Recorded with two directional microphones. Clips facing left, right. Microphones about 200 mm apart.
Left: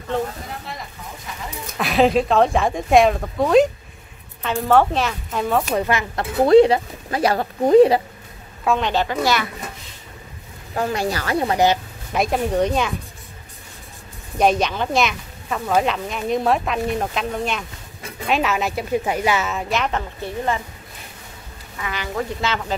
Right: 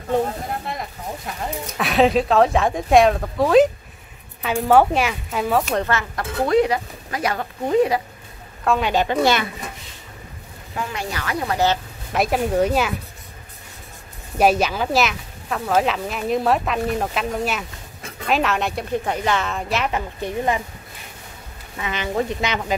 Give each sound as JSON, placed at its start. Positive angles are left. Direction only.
{"t": 0.5, "sound": "speech", "side_deg": -55}
{"t": 1.8, "sound": "a woman's voice", "side_deg": 0}
{"t": 6.4, "sound": "speech", "side_deg": 30}
{"t": 8.6, "sound": "a woman's voice", "side_deg": -5}
{"t": 9.0, "sound": "speech", "side_deg": -25}
{"t": 10.7, "sound": "speech", "side_deg": 40}
{"t": 11.5, "sound": "speech", "side_deg": 15}
{"t": 12.1, "sound": "speech", "side_deg": -5}
{"t": 14.4, "sound": "speech", "side_deg": -5}
{"t": 20.2, "sound": "a woman's voice", "side_deg": -15}
{"t": 21.7, "sound": "speech", "side_deg": -20}